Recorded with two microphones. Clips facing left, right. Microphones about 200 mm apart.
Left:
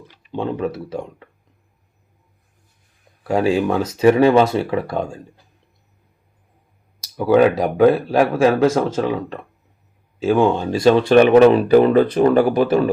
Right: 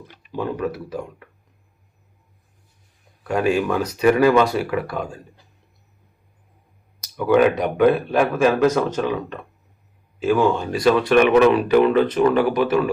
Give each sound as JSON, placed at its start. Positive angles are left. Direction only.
{"t": 0.3, "sound": "speech", "side_deg": 25}
{"t": 3.2, "sound": "speech", "side_deg": 30}
{"t": 7.8, "sound": "speech", "side_deg": 30}